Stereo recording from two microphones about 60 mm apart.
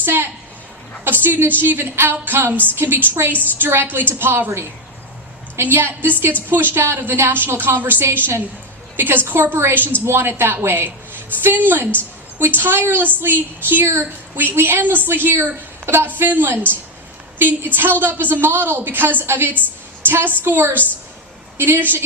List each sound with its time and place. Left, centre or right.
0.0 s a woman's voice: right
1.0 s a sound: right
1.6 s a woman's voice: right
13.8 s a woman's voice: right